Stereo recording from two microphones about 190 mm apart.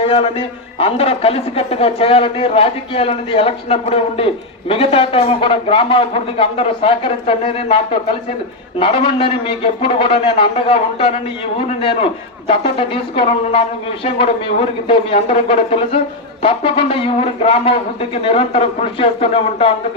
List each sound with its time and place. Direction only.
0.0 s a man's voice: 30° left (ahead or behind)